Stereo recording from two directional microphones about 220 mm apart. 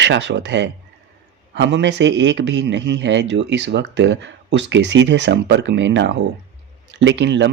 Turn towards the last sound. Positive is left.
turn(degrees=-55)  # may be behind; listen again after turning